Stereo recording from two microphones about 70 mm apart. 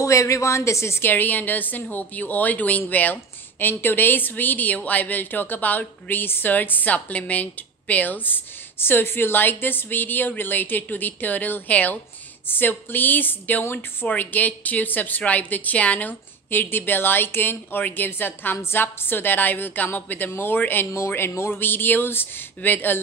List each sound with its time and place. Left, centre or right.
0.0 s a woman's voice: left